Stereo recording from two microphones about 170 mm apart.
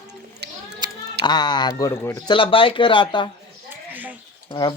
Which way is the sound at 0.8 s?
25° right (ahead or behind).